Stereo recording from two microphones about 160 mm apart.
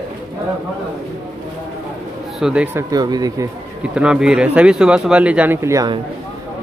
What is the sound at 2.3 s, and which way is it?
Speech, 5° right (ahead or behind).